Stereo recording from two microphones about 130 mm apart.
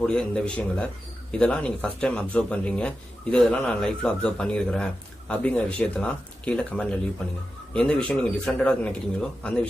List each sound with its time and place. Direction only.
0.0 s a man's voice: 5° left (ahead or behind)